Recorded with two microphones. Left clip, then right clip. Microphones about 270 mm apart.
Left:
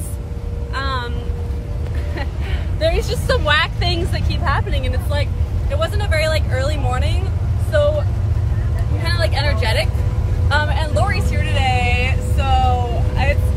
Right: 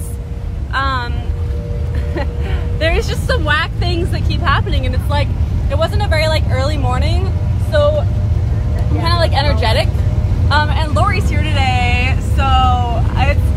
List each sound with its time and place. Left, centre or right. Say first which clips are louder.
0.7 s a sound: right 6 dB; centre
3.1 s a woman's voice: even; centre
9.0 s a woman's voice: right 5 dB; centre